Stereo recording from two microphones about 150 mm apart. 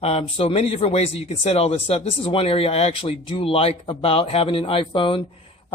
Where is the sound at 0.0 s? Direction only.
40° left (ahead or behind).